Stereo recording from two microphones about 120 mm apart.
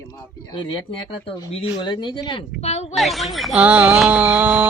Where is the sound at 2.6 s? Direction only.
65° left (ahead or behind).